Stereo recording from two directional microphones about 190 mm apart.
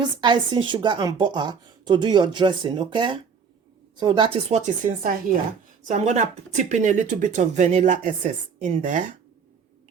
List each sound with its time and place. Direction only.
0.0 s a woman's voice: 25° right (ahead or behind); by 9.1 s 40° right (ahead or behind)